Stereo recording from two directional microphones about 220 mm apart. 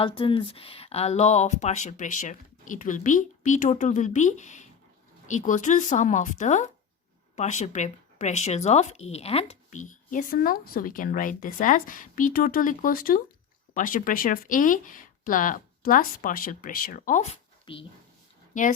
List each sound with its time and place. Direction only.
0.0 s speech: 25° left (ahead or behind)